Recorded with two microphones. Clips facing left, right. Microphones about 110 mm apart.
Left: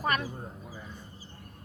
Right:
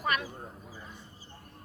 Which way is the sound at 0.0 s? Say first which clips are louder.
Left 2 dB; 40° left (ahead or behind).